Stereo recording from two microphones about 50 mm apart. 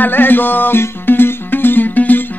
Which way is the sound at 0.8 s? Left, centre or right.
Left.